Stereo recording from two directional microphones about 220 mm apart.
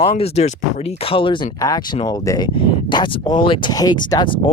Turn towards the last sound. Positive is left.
turn(degrees=20)  # may be behind; listen again after turning